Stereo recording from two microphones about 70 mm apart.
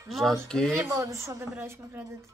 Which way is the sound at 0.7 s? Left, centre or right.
Right.